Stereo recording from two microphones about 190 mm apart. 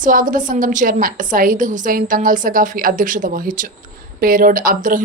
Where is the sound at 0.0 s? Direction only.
45° right (ahead or behind).